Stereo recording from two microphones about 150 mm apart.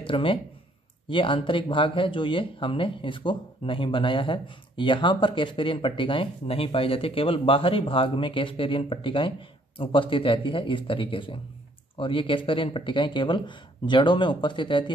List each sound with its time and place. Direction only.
0.0 s speech: 35° left (ahead or behind)